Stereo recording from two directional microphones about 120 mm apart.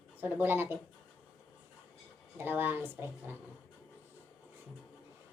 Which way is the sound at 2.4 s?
15° right (ahead or behind).